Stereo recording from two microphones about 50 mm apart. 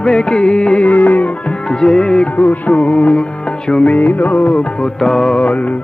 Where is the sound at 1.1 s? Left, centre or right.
Left.